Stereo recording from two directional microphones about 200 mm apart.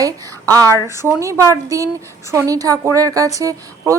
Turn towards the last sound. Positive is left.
turn(degrees=-15)  # may be behind; listen again after turning